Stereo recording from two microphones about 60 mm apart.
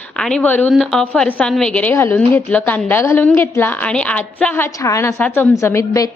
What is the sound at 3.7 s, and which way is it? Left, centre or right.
Speech, left.